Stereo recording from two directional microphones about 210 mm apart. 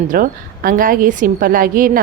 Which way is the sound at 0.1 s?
40° right (ahead or behind).